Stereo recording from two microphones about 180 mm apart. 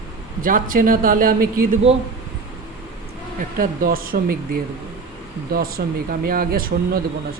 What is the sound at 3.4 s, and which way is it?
Speech, 50° right (ahead or behind).